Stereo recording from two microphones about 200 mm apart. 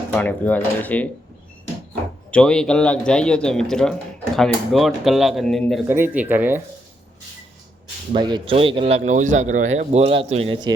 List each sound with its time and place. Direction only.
0.1 s speech: 10° left (ahead or behind)
2.3 s speech: 5° left (ahead or behind)
5.9 s speech: 10° right (ahead or behind)
8.1 s speech: 25° right (ahead or behind)